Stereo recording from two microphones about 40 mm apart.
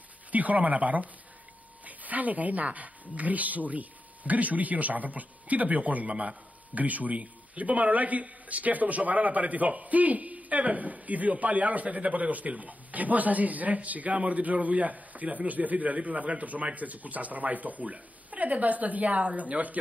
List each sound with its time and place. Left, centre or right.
0.3 s a man's voice: right